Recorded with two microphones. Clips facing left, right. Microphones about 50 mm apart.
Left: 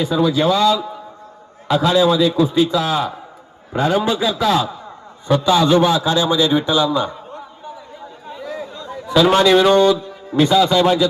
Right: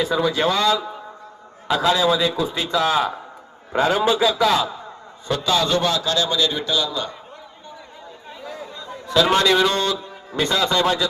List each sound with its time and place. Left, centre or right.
0.0 s a man's voice: centre
4.0 s speech: centre
4.4 s a man's voice: centre
5.3 s a man's voice: centre
9.0 s a man's voice: centre